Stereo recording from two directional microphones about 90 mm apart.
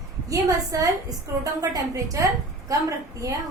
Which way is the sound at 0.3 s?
40° right (ahead or behind).